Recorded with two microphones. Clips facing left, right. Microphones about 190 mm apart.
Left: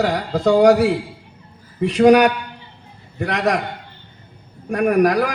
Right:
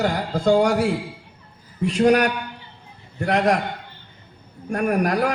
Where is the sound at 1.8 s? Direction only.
65° left (ahead or behind).